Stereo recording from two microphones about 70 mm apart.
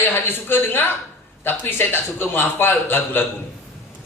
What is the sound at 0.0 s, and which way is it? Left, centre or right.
A man's voice, left.